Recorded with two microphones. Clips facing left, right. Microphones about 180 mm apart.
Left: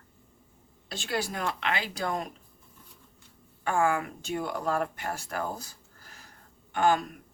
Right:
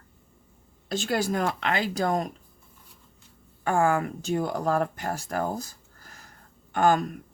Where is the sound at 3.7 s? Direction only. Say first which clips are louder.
Right 3 dB; 45° right (ahead or behind).